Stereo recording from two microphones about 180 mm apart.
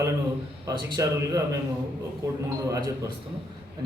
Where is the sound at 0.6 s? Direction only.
20° right (ahead or behind).